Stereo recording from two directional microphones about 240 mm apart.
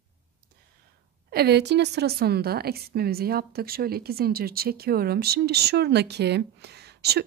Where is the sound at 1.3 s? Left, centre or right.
Right.